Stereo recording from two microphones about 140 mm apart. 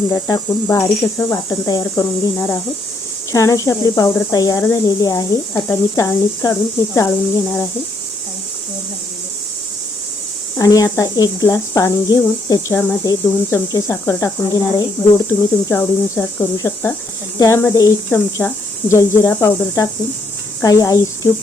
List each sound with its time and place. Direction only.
0.1 s speech: 25° left (ahead or behind)
10.6 s speech: 25° left (ahead or behind)
15.3 s speech: 15° left (ahead or behind)